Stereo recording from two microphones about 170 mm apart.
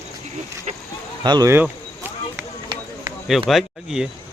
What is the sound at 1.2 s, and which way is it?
Speech, 25° right (ahead or behind).